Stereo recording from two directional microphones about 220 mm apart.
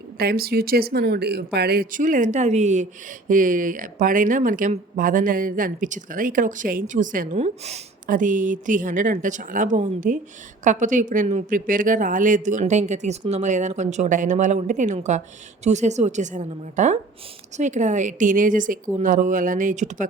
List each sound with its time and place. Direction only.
0.2 s speech: 45° right (ahead or behind)